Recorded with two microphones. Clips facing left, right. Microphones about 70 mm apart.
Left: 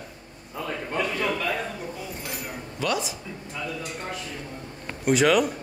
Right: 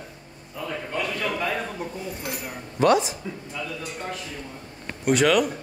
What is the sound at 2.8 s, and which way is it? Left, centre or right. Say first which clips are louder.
Speech: right 9 dB; right.